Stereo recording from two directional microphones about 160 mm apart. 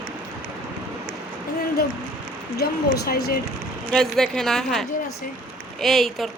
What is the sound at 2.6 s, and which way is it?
Speech, 75° left (ahead or behind).